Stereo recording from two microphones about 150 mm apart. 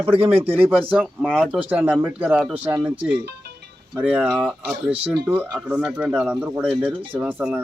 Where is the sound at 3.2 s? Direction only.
90° right.